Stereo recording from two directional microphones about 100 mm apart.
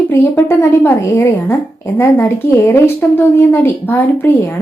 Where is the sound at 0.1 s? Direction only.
25° left (ahead or behind).